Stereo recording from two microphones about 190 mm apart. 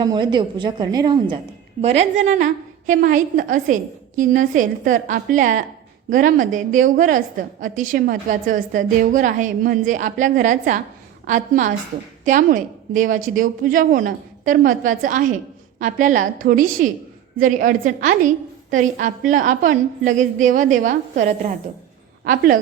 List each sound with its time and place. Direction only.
0.0 s a woman's voice: 20° right (ahead or behind)
1.8 s a woman's voice: 35° right (ahead or behind)